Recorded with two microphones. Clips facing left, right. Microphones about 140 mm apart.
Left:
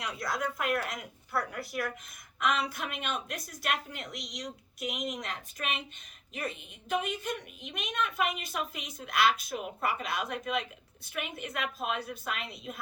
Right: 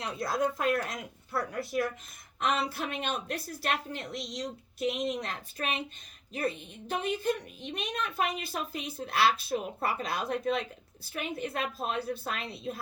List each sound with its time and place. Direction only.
0.0 s a woman's voice: 30° right (ahead or behind)